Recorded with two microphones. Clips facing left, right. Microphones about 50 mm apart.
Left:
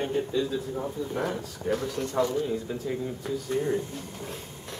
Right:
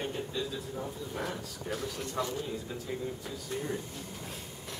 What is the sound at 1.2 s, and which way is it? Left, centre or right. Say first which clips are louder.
Speech: left 5 dB; centre.